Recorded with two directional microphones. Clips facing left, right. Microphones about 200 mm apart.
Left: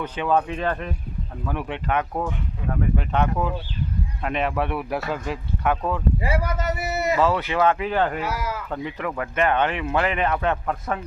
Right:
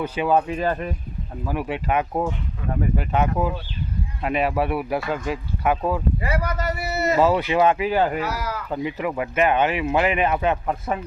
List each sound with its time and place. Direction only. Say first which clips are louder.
0.0 s speech: right 2 dB; 10° right (ahead or behind)
2.9 s speech: right 2 dB; 5° right (ahead or behind)
6.2 s a man's voice: even; 25° left (ahead or behind)
7.2 s speech: right 4 dB; 10° right (ahead or behind)
8.2 s a man's voice: right 1 dB; 25° left (ahead or behind)
8.7 s speech: right 6 dB; 10° right (ahead or behind)